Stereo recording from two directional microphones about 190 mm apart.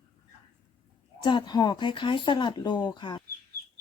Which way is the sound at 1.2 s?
25° left (ahead or behind).